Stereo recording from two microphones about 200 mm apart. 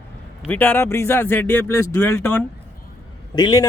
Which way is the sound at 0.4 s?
10° left (ahead or behind).